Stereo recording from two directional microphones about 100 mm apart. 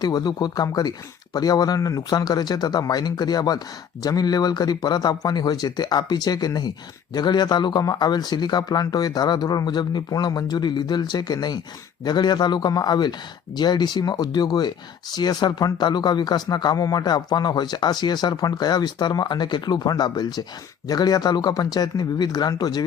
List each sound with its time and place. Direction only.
0.0 s speech: 40° left (ahead or behind)